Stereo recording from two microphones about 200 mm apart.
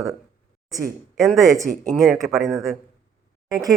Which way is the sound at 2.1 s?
Centre (ahead or behind).